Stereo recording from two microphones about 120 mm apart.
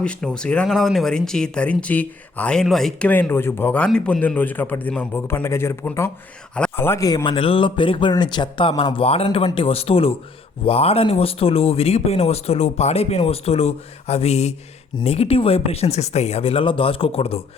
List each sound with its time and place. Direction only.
0.0 s speech: 10° left (ahead or behind)
3.1 s speech: 15° left (ahead or behind)
7.0 s speech: 30° left (ahead or behind)
7.3 s speech: 50° left (ahead or behind)
9.2 s speech: 40° left (ahead or behind)